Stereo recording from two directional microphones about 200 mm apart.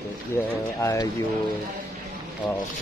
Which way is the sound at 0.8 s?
15° left (ahead or behind).